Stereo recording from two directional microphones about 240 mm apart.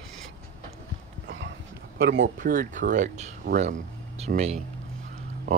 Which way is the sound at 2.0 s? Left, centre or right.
Right.